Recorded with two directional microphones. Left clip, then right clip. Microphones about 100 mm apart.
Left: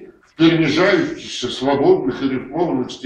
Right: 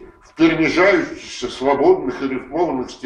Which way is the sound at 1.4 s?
25° right (ahead or behind).